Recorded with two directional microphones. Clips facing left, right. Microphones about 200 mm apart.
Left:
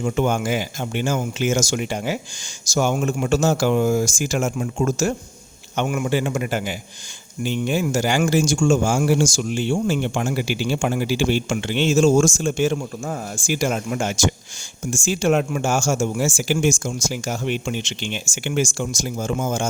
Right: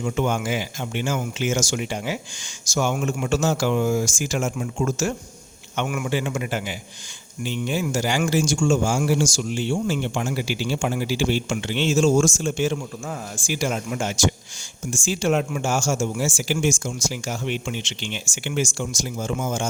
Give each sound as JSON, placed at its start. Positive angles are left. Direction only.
{"t": 0.0, "sound": "speech", "side_deg": 40}